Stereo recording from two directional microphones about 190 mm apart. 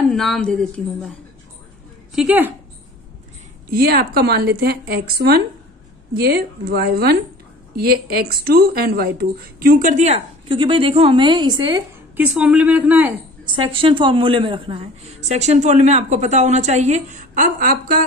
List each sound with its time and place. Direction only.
0.1 s a woman's voice: centre (ahead or behind)
2.1 s speech: 10° right (ahead or behind)
3.7 s a woman's voice: 55° right (ahead or behind); by 11.7 s 20° right (ahead or behind)
12.2 s speech: 5° right (ahead or behind)
13.7 s a woman's voice: 25° right (ahead or behind); by 17.9 s 50° right (ahead or behind)